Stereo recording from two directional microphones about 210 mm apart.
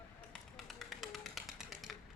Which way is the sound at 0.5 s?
Centre (ahead or behind).